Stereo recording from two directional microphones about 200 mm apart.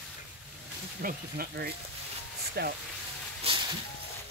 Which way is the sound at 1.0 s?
45° right (ahead or behind).